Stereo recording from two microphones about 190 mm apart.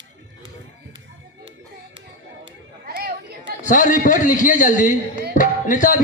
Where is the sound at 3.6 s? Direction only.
45° left (ahead or behind).